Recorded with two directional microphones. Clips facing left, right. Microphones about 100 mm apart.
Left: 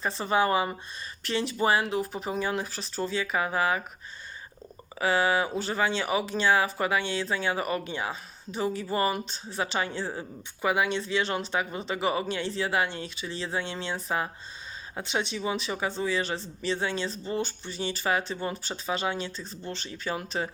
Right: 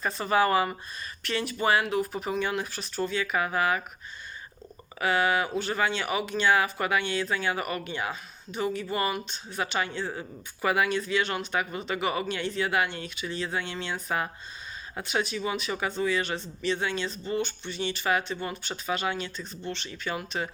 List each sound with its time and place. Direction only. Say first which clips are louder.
0.0 s speech: right 1 dB; 25° left (ahead or behind)
4.9 s speech: even; 25° left (ahead or behind)